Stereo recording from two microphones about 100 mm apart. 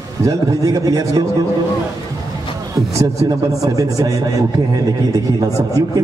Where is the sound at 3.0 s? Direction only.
35° right (ahead or behind).